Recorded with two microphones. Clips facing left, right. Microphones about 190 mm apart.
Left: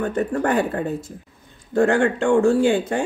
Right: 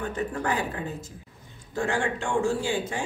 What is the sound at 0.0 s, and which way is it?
Speech, 55° left (ahead or behind).